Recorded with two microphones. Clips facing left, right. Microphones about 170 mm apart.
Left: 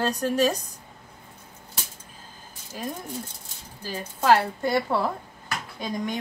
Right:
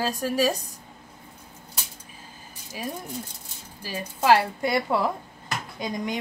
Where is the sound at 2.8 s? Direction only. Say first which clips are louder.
Even; 10° right (ahead or behind).